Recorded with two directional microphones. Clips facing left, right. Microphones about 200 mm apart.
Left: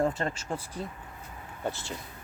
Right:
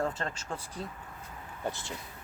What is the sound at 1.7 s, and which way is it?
Speech, 15° right (ahead or behind).